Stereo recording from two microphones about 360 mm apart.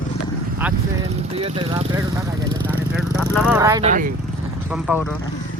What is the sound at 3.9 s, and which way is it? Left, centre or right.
Speech, right.